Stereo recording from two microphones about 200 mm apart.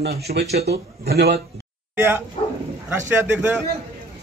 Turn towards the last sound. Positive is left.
turn(degrees=-5)  # may be behind; listen again after turning